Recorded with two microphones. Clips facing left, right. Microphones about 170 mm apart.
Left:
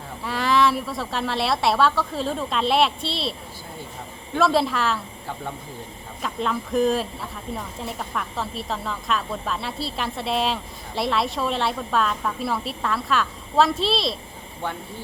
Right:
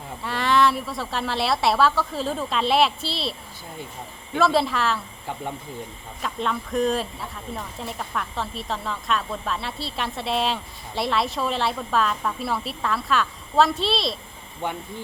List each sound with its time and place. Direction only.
0.2 s a woman's voice: centre (ahead or behind)
4.4 s speech: centre (ahead or behind)
6.2 s speech: centre (ahead or behind)